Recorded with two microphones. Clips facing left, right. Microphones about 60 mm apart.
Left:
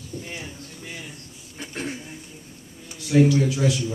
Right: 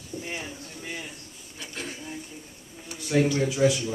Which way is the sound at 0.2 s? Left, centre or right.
Centre.